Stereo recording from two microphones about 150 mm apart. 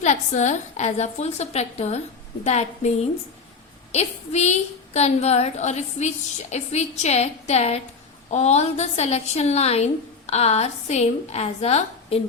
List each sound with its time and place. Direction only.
0.0 s a woman's voice: 50° left (ahead or behind)